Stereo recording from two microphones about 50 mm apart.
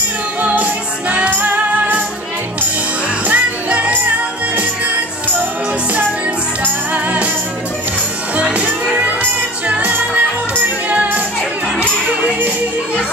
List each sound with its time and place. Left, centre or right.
0.4 s music: right
1.3 s music: right
3.3 s music: right
6.6 s music: right
8.4 s music: right
12.2 s music: right